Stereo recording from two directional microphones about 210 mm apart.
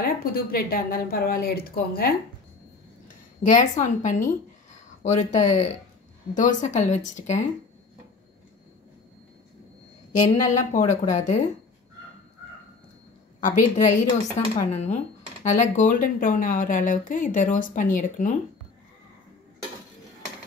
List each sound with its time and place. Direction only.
0.0 s speech: 45° left (ahead or behind)
3.4 s speech: 35° left (ahead or behind)
10.2 s speech: 35° left (ahead or behind)
13.4 s speech: 35° left (ahead or behind)